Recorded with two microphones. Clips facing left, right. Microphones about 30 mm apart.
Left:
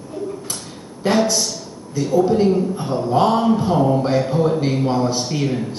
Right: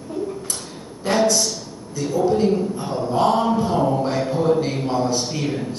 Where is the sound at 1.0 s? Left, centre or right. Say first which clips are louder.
Left 1 dB; centre.